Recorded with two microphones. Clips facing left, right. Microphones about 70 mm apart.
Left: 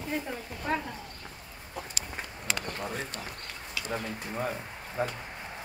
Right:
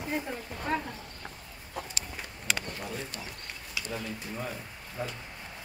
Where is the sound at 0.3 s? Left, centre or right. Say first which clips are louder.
Even; centre.